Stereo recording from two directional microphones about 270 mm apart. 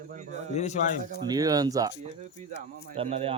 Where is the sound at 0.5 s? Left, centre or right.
Left.